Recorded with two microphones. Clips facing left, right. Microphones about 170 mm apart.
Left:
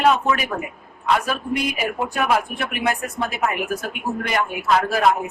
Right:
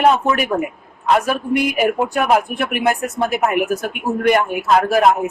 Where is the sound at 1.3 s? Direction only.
55° right (ahead or behind).